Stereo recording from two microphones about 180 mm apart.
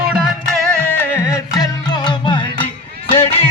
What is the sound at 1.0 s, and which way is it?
Music, 15° left (ahead or behind).